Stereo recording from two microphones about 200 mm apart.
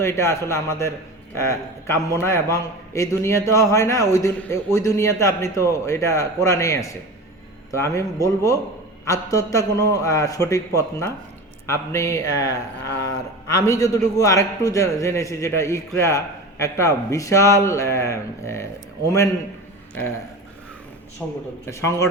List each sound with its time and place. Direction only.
0.0 s a man's voice: 15° left (ahead or behind)
21.7 s a man's voice: 15° left (ahead or behind)